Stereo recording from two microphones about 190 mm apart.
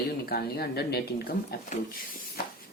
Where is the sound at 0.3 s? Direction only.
55° left (ahead or behind).